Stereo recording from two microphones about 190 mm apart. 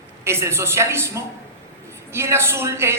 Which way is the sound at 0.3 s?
15° right (ahead or behind).